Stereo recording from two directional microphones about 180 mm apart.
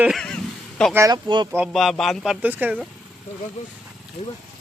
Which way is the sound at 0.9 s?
20° right (ahead or behind).